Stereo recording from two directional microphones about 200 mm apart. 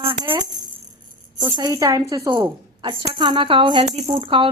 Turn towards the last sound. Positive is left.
turn(degrees=-25)  # may be behind; listen again after turning